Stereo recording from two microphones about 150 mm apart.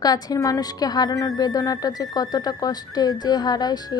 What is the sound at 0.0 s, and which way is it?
Speech, 25° left (ahead or behind).